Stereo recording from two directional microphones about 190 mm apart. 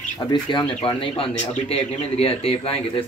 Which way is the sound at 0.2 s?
25° left (ahead or behind).